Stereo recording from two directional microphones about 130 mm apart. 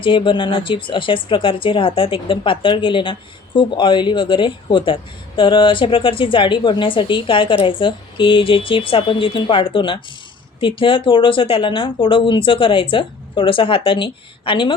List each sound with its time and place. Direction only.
0.0 s speech: 40° left (ahead or behind)